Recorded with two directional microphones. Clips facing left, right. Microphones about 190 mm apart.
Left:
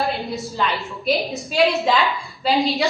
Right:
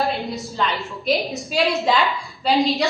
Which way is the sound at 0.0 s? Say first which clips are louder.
Even; centre (ahead or behind).